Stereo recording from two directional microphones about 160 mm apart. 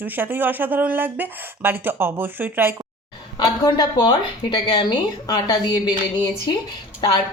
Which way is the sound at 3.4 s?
25° left (ahead or behind).